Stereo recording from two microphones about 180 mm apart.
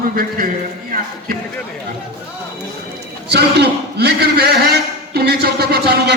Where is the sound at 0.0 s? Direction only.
55° right (ahead or behind).